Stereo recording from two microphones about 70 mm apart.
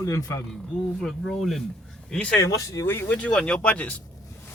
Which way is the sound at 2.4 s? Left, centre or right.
Left.